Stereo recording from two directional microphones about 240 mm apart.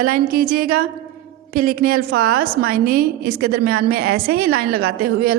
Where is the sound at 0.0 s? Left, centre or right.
Right.